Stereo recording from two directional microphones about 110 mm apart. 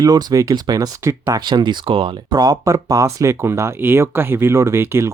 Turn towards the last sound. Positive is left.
turn(degrees=-25)  # may be behind; listen again after turning